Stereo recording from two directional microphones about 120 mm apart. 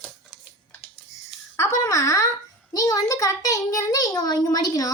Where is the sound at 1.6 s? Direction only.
25° left (ahead or behind).